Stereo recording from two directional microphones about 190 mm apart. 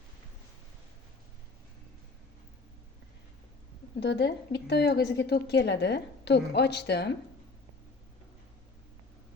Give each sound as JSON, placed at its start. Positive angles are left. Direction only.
{"t": 4.0, "sound": "a woman's voice", "side_deg": 65}